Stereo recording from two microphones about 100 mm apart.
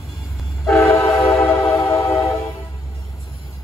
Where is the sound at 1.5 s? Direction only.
30° left (ahead or behind).